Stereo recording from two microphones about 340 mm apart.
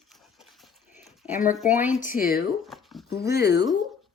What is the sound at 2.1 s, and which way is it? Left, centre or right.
Speech, left.